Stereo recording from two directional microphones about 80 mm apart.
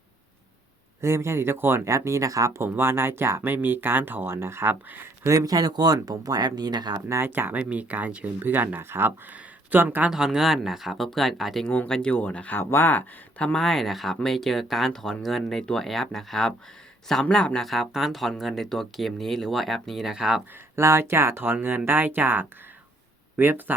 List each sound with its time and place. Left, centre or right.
1.0 s speech: right
2.7 s speech: right
5.2 s speech: right
7.1 s speech: right
10.1 s speech: centre
11.6 s speech: left
11.9 s speech: centre
13.5 s speech: centre
20.7 s speech: right